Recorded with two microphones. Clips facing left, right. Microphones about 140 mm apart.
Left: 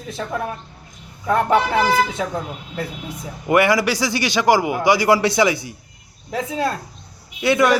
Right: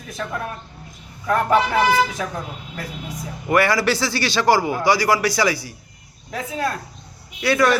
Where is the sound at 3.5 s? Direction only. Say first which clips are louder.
Left 2 dB; 20° left (ahead or behind).